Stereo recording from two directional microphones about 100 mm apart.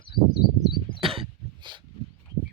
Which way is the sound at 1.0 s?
65° right (ahead or behind).